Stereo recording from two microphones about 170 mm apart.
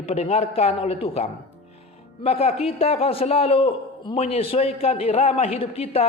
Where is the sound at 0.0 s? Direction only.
40° left (ahead or behind).